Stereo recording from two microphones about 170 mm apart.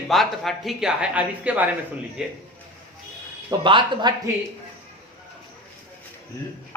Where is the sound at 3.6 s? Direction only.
30° right (ahead or behind).